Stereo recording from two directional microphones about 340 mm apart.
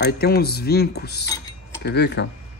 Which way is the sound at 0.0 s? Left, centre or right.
Left.